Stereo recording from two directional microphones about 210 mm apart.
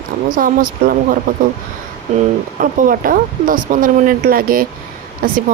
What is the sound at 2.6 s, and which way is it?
Speech, 40° right (ahead or behind).